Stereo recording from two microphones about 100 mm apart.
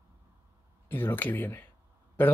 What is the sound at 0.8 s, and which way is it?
Speech, 20° left (ahead or behind).